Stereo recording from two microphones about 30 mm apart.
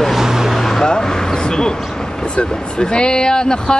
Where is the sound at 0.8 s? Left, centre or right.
Left.